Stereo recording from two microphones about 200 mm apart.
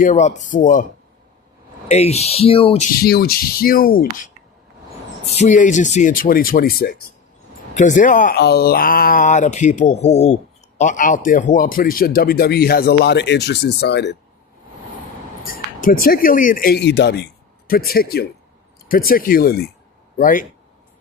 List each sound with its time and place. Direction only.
0.0 s speech: 40° left (ahead or behind)
1.9 s speech: 30° left (ahead or behind)
3.0 s speech: 50° left (ahead or behind)
5.2 s speech: 35° left (ahead or behind); by 6.9 s 50° left (ahead or behind)
7.7 s speech: 40° left (ahead or behind); by 14.2 s 55° left (ahead or behind)
15.5 s speech: 45° left (ahead or behind)